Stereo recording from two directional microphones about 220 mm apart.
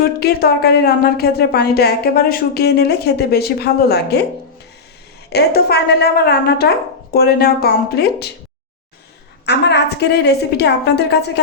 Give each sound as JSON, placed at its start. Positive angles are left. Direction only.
{"t": 0.2, "sound": "a woman's voice", "side_deg": 45}
{"t": 5.3, "sound": "a woman's voice", "side_deg": 45}
{"t": 9.5, "sound": "a woman's voice", "side_deg": 50}